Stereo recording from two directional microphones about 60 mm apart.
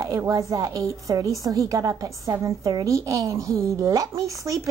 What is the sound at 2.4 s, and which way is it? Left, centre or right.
Speech, right.